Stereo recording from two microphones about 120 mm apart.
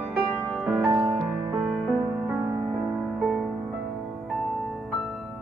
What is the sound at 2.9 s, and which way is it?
Music, centre (ahead or behind).